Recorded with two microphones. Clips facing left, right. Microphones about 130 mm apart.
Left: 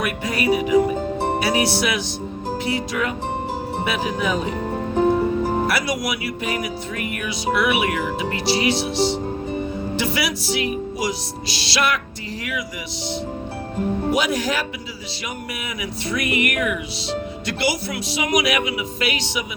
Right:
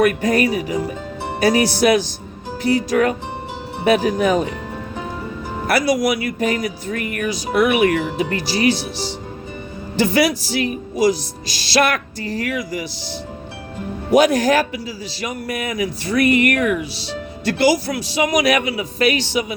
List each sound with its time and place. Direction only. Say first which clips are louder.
0.0 s speech: right 7 dB; 45° right (ahead or behind)
4.9 s music: left 14 dB; 40° left (ahead or behind)
5.6 s speech: right 6 dB; 45° right (ahead or behind)
10.0 s speech: right 10 dB; 45° right (ahead or behind)
14.1 s speech: right 11 dB; 45° right (ahead or behind)